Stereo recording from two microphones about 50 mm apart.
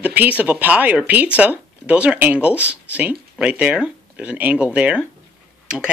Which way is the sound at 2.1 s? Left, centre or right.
Right.